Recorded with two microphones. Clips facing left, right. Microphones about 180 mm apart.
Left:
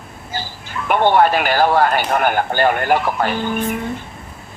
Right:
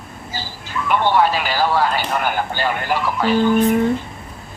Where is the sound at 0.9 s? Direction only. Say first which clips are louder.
Left 3 dB; 55° left (ahead or behind).